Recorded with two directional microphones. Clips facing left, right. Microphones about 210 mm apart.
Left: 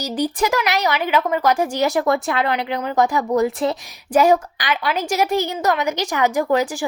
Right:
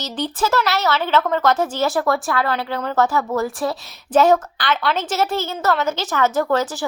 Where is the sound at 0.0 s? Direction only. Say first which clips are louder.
Left 3 dB; 15° left (ahead or behind).